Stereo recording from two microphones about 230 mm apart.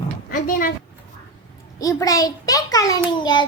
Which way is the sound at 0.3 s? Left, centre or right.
Left.